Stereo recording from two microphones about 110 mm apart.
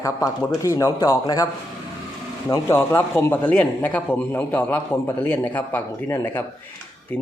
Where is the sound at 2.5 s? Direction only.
20° left (ahead or behind).